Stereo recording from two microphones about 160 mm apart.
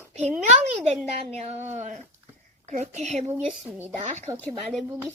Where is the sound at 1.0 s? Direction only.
40° right (ahead or behind).